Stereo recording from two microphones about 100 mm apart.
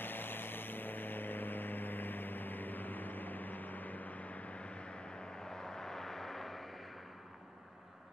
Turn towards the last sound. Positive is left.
turn(degrees=5)  # may be behind; listen again after turning